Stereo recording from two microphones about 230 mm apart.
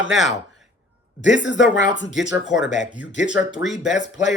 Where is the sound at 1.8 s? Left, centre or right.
Left.